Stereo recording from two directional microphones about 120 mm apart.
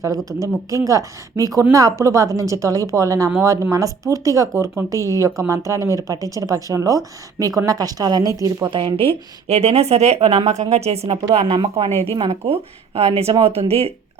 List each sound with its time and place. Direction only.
0.3 s a woman's voice: 25° right (ahead or behind)
8.7 s speech: 45° right (ahead or behind)